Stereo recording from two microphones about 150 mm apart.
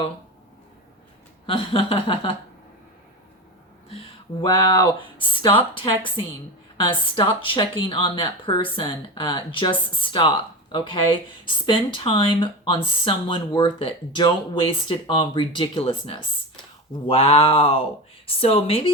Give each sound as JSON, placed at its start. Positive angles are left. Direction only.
{"t": 1.5, "sound": "speech", "side_deg": 35}
{"t": 3.8, "sound": "speech", "side_deg": 35}